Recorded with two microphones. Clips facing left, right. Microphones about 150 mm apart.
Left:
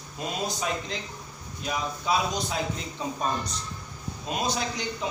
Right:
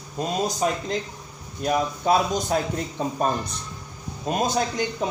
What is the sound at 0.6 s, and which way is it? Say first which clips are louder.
A man's voice: right 6 dB; 40° right (ahead or behind).